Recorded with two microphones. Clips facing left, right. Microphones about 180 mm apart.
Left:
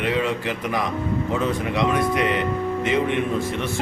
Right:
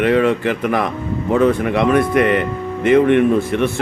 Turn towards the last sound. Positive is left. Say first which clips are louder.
# right 7 dB
turn(degrees=-60)  # may be behind; listen again after turning